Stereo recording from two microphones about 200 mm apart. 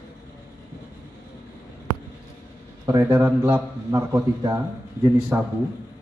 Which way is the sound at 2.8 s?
15° right (ahead or behind).